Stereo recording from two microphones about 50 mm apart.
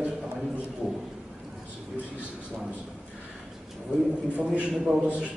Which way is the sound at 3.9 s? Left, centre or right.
Right.